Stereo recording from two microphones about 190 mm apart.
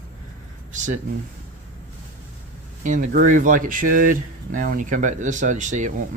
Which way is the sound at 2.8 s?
40° right (ahead or behind).